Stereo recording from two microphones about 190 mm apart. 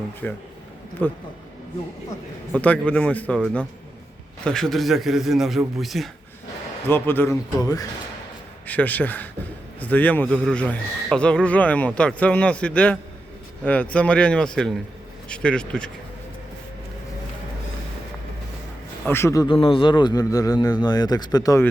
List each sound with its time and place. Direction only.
0.2 s speech: 5° left (ahead or behind)
2.5 s a man's voice: 5° left (ahead or behind)
6.8 s a man's voice: 10° left (ahead or behind)
19.0 s a man's voice: 10° left (ahead or behind)